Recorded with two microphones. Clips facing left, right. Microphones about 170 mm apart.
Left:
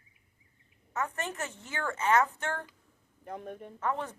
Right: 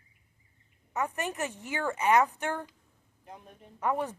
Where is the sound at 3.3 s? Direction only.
60° left (ahead or behind).